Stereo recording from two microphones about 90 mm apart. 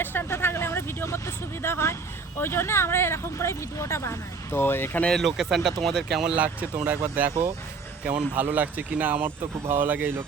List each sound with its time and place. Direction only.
0.0 s vehicle: 25° left (ahead or behind)
1.6 s speech: 30° left (ahead or behind)
5.0 s speech: centre (ahead or behind)
6.3 s speech: 15° right (ahead or behind)